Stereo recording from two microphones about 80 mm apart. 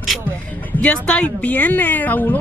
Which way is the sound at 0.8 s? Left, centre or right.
Centre.